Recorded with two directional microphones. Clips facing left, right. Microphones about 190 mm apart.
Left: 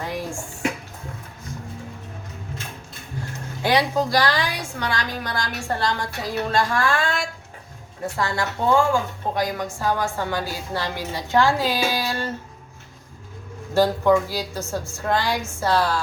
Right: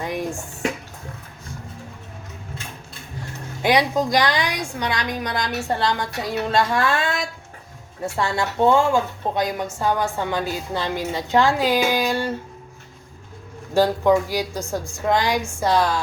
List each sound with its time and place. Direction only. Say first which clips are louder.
3.6 s a woman's voice: right 2 dB; 20° right (ahead or behind)
8.1 s a woman's voice: right 2 dB; 25° right (ahead or behind)
13.7 s a woman's voice: right 1 dB; 15° right (ahead or behind)